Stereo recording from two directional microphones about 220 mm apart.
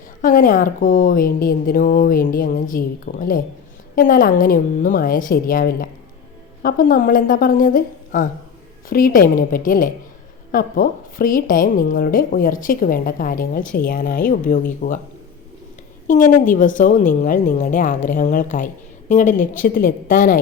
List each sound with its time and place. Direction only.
0.2 s a woman's voice: 35° left (ahead or behind)
16.0 s a woman's voice: 35° left (ahead or behind)